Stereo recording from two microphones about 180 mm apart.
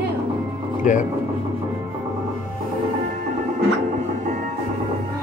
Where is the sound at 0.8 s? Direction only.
45° left (ahead or behind).